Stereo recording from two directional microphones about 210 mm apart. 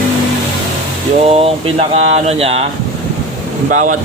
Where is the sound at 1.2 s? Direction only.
30° right (ahead or behind).